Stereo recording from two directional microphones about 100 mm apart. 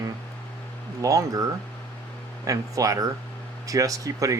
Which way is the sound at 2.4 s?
35° right (ahead or behind).